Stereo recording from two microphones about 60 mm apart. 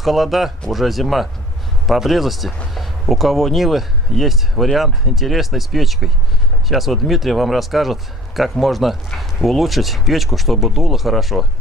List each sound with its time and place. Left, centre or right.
0.0 s speech: centre